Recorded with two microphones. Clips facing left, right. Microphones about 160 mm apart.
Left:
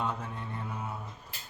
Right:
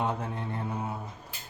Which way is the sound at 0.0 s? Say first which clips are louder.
Right 4 dB; 30° right (ahead or behind).